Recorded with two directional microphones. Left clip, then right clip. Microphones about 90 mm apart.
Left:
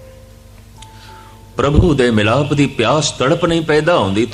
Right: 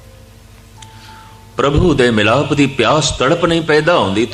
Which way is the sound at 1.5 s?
40° left (ahead or behind).